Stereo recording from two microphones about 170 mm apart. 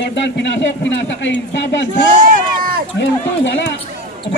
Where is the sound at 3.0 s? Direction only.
90° left.